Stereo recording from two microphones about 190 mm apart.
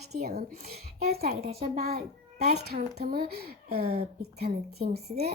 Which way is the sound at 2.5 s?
55° right (ahead or behind).